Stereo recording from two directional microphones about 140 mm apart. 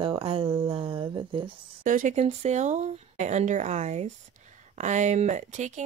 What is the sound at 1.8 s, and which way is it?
Speech, 70° right (ahead or behind).